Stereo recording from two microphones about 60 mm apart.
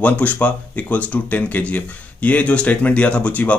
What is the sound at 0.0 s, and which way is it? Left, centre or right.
Speech, left.